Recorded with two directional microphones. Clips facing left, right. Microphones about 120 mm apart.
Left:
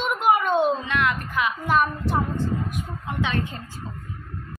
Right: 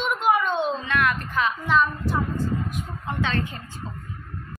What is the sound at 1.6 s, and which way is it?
Speech, 50° left (ahead or behind).